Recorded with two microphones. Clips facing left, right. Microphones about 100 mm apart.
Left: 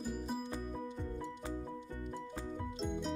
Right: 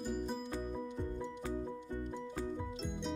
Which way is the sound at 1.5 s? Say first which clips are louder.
Right 3 dB; 20° right (ahead or behind).